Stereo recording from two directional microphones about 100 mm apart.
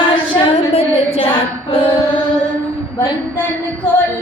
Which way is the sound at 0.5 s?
90° left.